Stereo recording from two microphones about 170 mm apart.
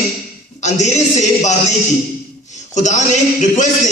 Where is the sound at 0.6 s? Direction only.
45° left (ahead or behind).